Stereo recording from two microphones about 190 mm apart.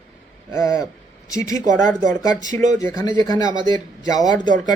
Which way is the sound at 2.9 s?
20° left (ahead or behind).